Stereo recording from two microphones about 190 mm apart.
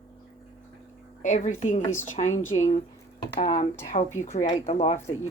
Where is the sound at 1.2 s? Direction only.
40° left (ahead or behind).